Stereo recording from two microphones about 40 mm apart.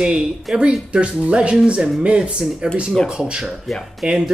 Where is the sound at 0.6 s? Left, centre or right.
Right.